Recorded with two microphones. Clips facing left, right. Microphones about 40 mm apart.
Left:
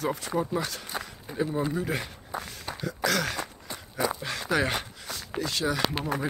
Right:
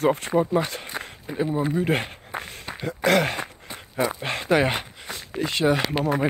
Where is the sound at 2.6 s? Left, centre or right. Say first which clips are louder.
Right 5 dB; right.